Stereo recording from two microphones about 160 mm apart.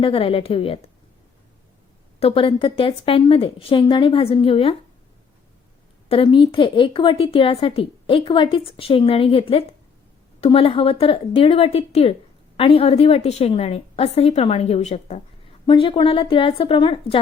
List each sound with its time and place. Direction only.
0.0 s a woman's voice: 35° left (ahead or behind)
2.1 s a woman's voice: 35° left (ahead or behind)
6.1 s a woman's voice: 35° left (ahead or behind)
15.6 s a woman's voice: 30° left (ahead or behind)